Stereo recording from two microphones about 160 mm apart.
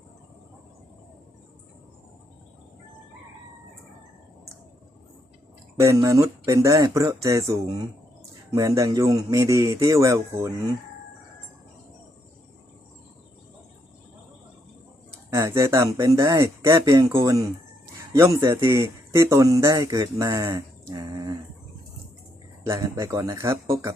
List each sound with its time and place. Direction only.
5.8 s speech: 20° right (ahead or behind)
15.3 s speech: 20° right (ahead or behind)
22.6 s speech: 20° right (ahead or behind)